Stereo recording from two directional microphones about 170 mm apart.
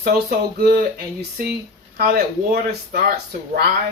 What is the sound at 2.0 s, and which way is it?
Speech, 65° right (ahead or behind).